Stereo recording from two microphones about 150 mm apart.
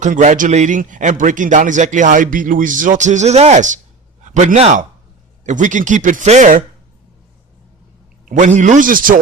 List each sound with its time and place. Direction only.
0.0 s a man's voice: 55° right (ahead or behind)
8.2 s speech: 60° right (ahead or behind)